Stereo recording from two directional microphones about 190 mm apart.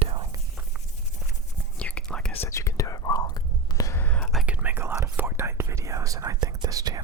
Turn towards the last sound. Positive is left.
turn(degrees=-20)  # may be behind; listen again after turning